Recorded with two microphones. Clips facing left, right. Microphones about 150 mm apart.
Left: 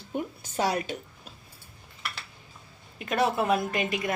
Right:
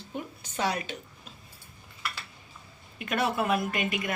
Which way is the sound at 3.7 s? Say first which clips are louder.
Left 2 dB; 30° left (ahead or behind).